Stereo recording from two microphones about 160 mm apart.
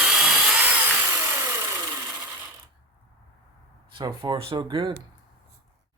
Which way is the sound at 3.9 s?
30° right (ahead or behind).